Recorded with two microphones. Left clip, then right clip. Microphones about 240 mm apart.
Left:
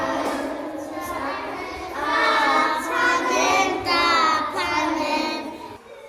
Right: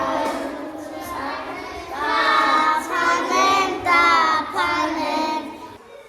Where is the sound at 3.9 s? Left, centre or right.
Centre.